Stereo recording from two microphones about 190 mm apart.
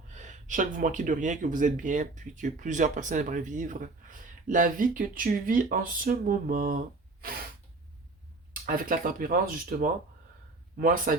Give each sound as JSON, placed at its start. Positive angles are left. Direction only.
{"t": 0.1, "sound": "speech", "side_deg": -40}
{"t": 8.6, "sound": "speech", "side_deg": -50}